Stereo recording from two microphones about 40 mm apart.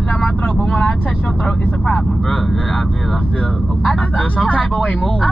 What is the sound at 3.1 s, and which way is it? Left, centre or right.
Speech, left.